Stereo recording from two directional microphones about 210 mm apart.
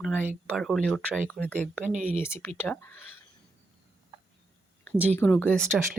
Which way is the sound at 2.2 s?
10° left (ahead or behind).